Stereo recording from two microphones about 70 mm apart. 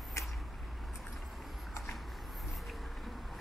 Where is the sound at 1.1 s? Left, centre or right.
Centre.